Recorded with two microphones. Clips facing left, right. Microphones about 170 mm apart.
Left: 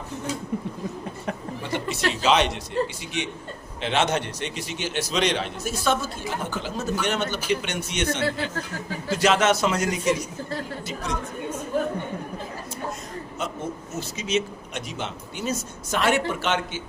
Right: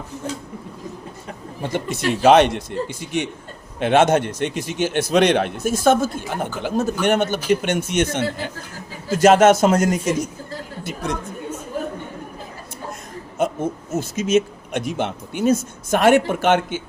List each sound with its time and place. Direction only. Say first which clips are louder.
1.6 s a man's voice: right 4 dB; 50° right (ahead or behind)
13.4 s a man's voice: right 10 dB; 50° right (ahead or behind)